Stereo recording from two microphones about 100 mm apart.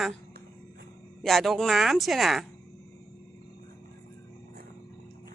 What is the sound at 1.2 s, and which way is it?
Speech, centre (ahead or behind).